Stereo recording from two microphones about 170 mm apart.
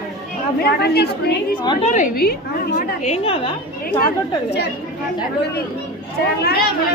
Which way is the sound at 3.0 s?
40° left (ahead or behind).